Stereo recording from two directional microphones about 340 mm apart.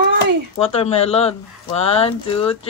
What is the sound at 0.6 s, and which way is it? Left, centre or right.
Speech, centre.